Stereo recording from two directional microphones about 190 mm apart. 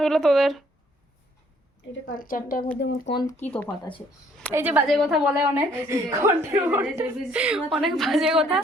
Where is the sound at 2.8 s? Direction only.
65° left (ahead or behind).